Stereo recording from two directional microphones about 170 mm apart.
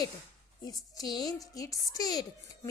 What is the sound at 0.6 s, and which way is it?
A woman's voice, 20° left (ahead or behind).